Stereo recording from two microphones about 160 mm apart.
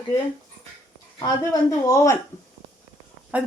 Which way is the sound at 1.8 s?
20° left (ahead or behind).